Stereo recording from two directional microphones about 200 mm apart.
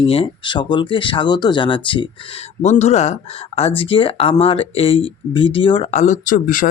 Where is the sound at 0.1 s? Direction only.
25° left (ahead or behind).